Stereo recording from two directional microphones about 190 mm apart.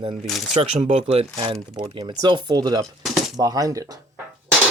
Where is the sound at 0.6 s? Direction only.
35° right (ahead or behind); by 4.0 s 20° right (ahead or behind).